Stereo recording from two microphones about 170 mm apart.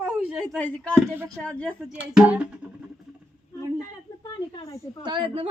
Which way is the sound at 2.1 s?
5° right (ahead or behind).